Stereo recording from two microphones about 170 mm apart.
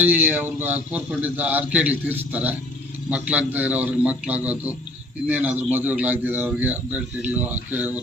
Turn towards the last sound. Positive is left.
turn(degrees=-10)  # may be behind; listen again after turning